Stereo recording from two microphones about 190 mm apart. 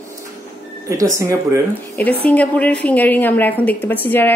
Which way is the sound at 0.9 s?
15° right (ahead or behind).